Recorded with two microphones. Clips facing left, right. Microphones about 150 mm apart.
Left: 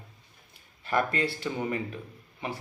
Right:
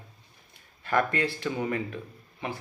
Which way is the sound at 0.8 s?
30° left (ahead or behind).